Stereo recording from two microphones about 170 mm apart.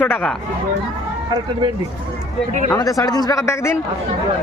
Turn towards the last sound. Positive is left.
turn(degrees=15)  # may be behind; listen again after turning